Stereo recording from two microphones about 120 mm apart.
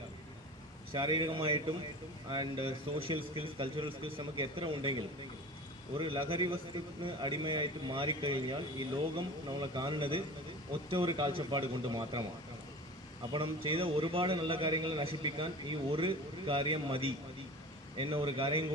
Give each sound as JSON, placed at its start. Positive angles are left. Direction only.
{"t": 0.9, "sound": "a man's voice", "side_deg": -40}
{"t": 13.3, "sound": "a man's voice", "side_deg": -45}